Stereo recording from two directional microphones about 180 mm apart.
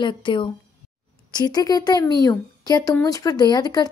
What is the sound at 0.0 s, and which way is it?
A woman's voice, 25° left (ahead or behind).